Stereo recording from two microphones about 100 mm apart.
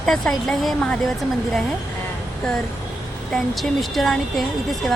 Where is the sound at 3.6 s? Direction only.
Centre (ahead or behind).